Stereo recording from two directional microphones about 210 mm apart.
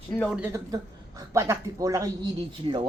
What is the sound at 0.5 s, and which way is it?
A woman's voice, 15° right (ahead or behind).